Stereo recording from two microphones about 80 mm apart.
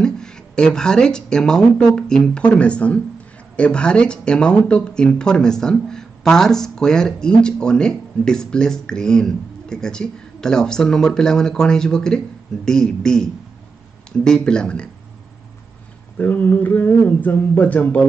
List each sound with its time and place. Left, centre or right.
0.0 s speech: centre
16.2 s speech: left